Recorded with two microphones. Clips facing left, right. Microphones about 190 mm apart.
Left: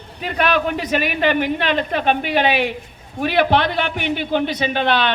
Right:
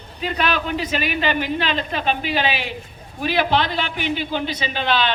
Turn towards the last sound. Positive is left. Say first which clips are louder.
# left 3 dB
turn(degrees=60)  # may be behind; listen again after turning